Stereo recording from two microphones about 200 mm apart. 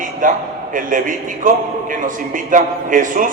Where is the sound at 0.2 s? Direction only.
40° right (ahead or behind).